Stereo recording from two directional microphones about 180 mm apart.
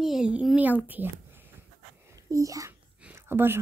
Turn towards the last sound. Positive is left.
turn(degrees=-10)  # may be behind; listen again after turning